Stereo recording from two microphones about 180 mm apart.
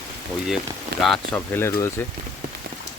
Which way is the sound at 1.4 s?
15° left (ahead or behind).